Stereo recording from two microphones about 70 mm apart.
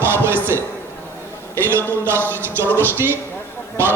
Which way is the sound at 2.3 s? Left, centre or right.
Right.